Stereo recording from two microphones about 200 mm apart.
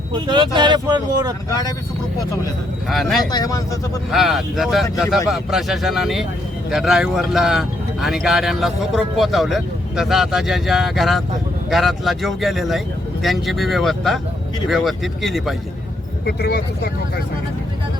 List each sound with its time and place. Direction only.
0.1 s speech: 20° right (ahead or behind)
1.5 s speech: 20° left (ahead or behind)
2.9 s speech: centre (ahead or behind)
3.3 s speech: 15° left (ahead or behind)
4.1 s speech: centre (ahead or behind)
16.2 s speech: 55° left (ahead or behind)